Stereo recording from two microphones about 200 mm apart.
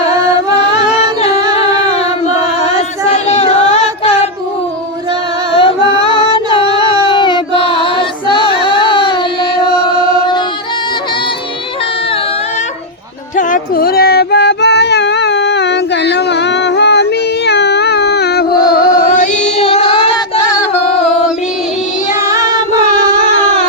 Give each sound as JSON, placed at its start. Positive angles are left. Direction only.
{"t": 1.5, "sound": "music", "side_deg": 30}
{"t": 2.0, "sound": "singing", "side_deg": 30}
{"t": 5.5, "sound": "music", "side_deg": 25}
{"t": 7.1, "sound": "a sound", "side_deg": 25}
{"t": 8.4, "sound": "music", "side_deg": 25}
{"t": 9.9, "sound": "chant", "side_deg": -25}
{"t": 13.3, "sound": "child singing", "side_deg": 45}
{"t": 18.7, "sound": "music", "side_deg": 45}
{"t": 20.5, "sound": "music", "side_deg": 15}
{"t": 22.2, "sound": "child singing", "side_deg": -15}